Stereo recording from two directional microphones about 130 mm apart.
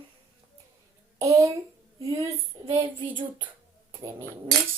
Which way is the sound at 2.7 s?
40° right (ahead or behind).